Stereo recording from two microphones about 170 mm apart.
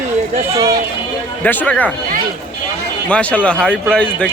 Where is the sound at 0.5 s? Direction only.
20° right (ahead or behind).